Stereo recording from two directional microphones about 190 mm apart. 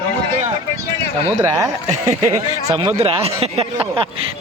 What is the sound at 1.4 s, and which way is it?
Speech, 15° right (ahead or behind).